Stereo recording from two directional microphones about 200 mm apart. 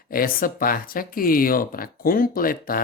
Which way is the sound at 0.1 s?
45° left (ahead or behind).